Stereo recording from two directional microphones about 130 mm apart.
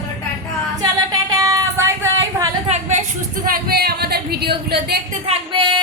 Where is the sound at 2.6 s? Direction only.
60° right (ahead or behind).